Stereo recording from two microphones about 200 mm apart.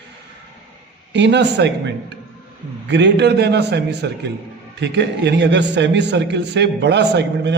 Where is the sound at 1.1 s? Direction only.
60° right (ahead or behind).